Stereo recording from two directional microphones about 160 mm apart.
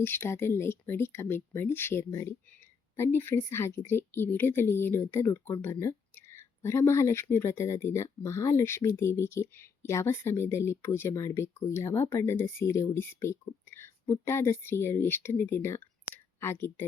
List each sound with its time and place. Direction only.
0.0 s speech: 15° left (ahead or behind)